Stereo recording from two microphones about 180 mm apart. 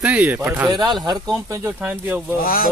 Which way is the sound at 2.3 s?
55° left (ahead or behind).